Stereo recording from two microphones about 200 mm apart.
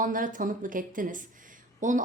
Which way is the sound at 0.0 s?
45° right (ahead or behind).